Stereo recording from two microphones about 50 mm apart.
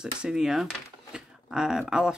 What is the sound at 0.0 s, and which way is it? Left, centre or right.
Speech, centre.